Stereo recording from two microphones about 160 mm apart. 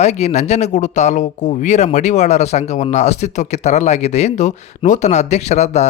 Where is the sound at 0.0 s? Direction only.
45° left (ahead or behind).